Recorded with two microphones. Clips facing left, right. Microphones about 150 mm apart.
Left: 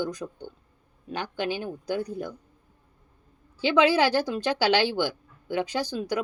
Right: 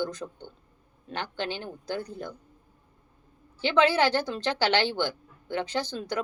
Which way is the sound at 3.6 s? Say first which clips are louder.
Left 2 dB; 15° left (ahead or behind).